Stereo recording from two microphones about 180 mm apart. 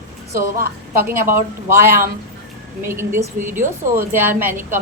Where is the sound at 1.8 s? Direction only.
15° right (ahead or behind).